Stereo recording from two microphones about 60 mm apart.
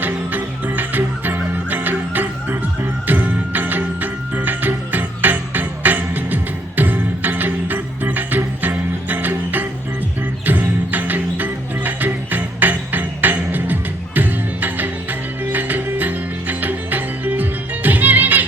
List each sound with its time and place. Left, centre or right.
0.0 s music: right